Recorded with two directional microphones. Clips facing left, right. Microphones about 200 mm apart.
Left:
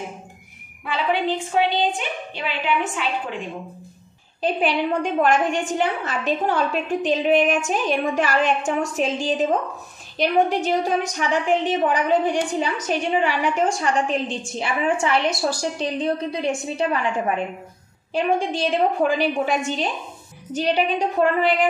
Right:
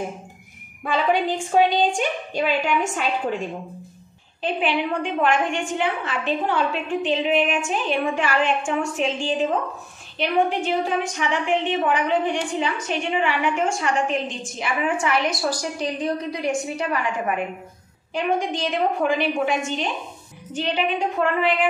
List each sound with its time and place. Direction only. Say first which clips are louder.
0.8 s a woman's voice: right 1 dB; 45° right (ahead or behind)
4.4 s a woman's voice: left 2 dB; 40° left (ahead or behind)
18.1 s a woman's voice: left 2 dB; 30° left (ahead or behind)